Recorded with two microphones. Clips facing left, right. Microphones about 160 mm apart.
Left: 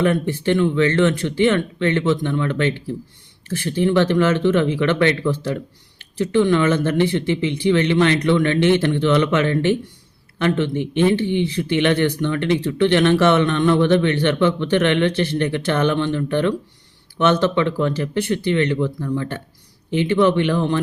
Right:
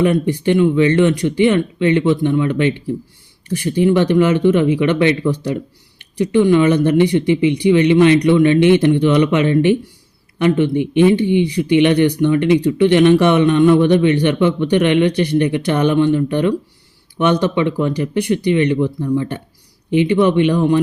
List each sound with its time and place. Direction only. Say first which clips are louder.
0.0 s speech: right 4 dB; 15° right (ahead or behind)